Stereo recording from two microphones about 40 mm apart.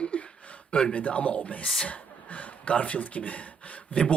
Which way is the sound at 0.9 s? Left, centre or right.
Left.